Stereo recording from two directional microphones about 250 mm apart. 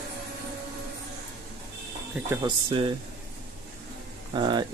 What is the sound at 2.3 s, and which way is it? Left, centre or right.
Speech, centre.